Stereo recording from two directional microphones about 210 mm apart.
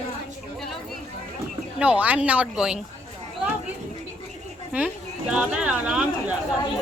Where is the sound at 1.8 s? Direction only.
5° right (ahead or behind).